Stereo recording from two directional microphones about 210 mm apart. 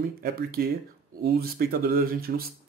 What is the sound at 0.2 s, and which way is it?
Speech, 45° right (ahead or behind).